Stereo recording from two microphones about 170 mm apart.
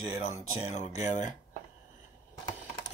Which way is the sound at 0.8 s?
40° left (ahead or behind).